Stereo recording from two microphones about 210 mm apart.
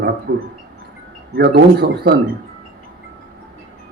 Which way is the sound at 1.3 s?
50° right (ahead or behind).